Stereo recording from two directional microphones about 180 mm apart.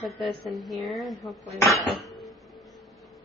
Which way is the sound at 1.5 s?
15° left (ahead or behind).